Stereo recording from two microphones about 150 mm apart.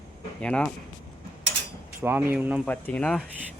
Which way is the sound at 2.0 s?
10° right (ahead or behind).